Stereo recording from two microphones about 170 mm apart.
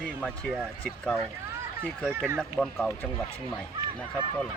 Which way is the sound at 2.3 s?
Centre (ahead or behind).